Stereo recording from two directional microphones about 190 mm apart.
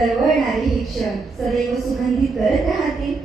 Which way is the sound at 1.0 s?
Centre (ahead or behind).